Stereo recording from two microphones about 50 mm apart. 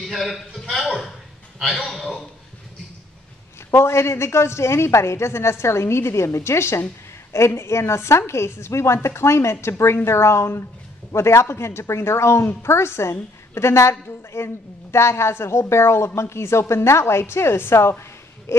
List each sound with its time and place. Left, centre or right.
0.1 s a man's voice: centre
3.7 s a woman's voice: left